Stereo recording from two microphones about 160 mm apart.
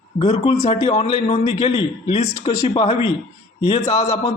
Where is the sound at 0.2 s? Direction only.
40° left (ahead or behind).